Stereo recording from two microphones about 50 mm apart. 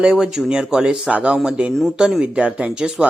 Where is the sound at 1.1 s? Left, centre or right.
Right.